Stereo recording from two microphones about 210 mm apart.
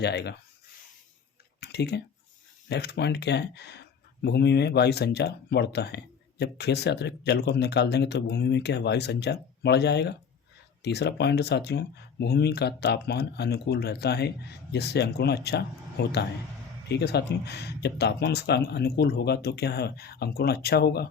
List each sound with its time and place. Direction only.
0.0 s speech: 50° left (ahead or behind)
1.6 s a sound: 55° left (ahead or behind)
2.6 s speech: 55° left (ahead or behind)